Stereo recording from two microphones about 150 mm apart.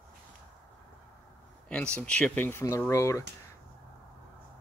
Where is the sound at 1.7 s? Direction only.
5° left (ahead or behind).